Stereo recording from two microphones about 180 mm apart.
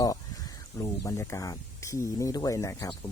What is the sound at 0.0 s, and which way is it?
Speech, 20° left (ahead or behind).